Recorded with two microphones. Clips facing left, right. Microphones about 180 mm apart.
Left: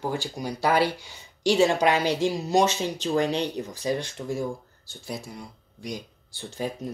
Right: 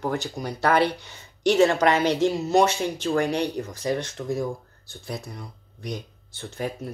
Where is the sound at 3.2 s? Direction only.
10° right (ahead or behind).